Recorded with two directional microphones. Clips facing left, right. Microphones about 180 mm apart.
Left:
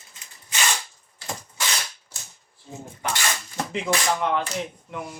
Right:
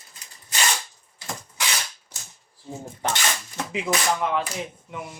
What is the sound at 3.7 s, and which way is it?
Speech, centre (ahead or behind).